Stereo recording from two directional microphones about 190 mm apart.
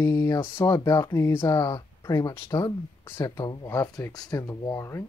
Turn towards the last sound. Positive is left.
turn(degrees=15)  # may be behind; listen again after turning